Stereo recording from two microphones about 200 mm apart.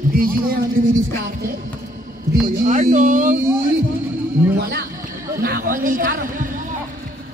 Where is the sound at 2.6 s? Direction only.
40° right (ahead or behind).